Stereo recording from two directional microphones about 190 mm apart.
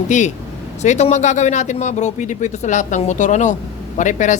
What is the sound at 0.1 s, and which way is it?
Speech, 40° left (ahead or behind).